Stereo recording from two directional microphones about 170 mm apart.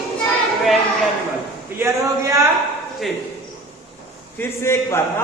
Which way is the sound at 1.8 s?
15° right (ahead or behind).